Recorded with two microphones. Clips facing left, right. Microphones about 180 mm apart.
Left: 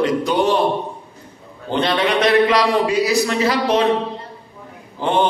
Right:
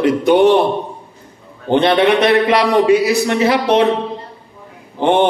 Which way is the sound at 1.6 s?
60° right (ahead or behind).